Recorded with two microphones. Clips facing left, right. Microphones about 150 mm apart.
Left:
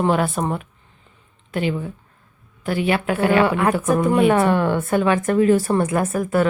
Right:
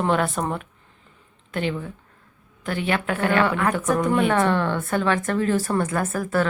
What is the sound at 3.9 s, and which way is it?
Speech, 10° left (ahead or behind).